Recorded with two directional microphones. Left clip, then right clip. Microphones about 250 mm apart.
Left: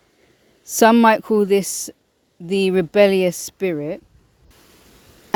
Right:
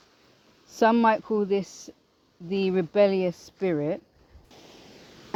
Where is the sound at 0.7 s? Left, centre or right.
Left.